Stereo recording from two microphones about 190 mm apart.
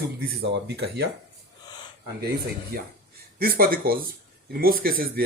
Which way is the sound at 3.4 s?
50° right (ahead or behind).